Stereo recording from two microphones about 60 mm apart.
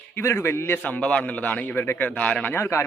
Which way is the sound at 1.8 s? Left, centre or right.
Left.